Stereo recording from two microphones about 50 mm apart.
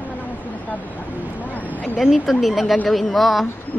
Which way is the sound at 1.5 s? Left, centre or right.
Left.